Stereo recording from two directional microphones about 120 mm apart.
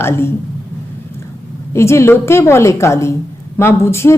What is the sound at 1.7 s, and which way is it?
Speech, 25° left (ahead or behind).